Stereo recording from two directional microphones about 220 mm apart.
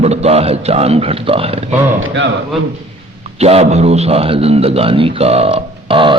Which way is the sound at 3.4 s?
30° right (ahead or behind).